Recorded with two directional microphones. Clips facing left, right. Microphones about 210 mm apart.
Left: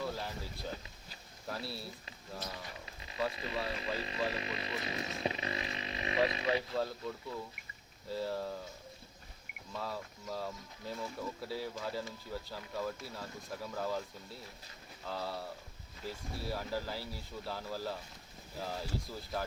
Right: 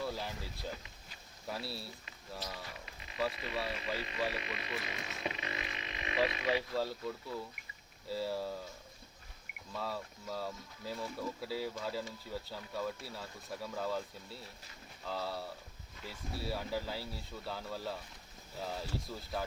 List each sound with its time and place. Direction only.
0.0 s a sound: centre (ahead or behind)
1.5 s speech: centre (ahead or behind)
2.4 s speech: 25° left (ahead or behind)
8.1 s speech: 5° right (ahead or behind)
9.7 s speech: centre (ahead or behind)
15.0 s speech: centre (ahead or behind)
16.4 s speech: centre (ahead or behind)